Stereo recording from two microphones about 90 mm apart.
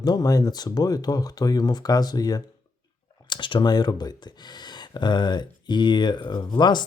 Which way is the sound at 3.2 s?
65° left (ahead or behind).